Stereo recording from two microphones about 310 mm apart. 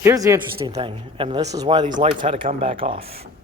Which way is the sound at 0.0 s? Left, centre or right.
Centre.